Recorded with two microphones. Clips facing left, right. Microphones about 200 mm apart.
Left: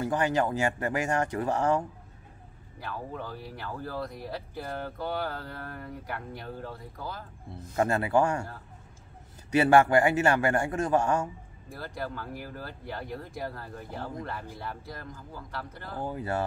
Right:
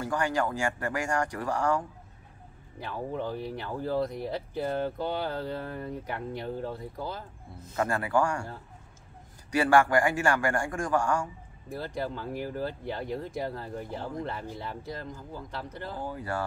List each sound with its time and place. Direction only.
0.0 s speech: 20° left (ahead or behind)
2.8 s speech: 20° right (ahead or behind)
7.7 s speech: 25° left (ahead or behind)
9.5 s speech: 20° left (ahead or behind)
11.7 s speech: 20° right (ahead or behind)
16.0 s speech: 20° left (ahead or behind)